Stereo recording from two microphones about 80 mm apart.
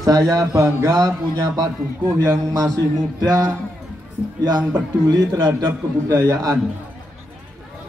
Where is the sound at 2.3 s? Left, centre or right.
Right.